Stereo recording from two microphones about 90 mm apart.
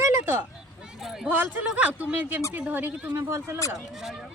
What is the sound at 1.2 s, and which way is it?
Speech, 20° right (ahead or behind).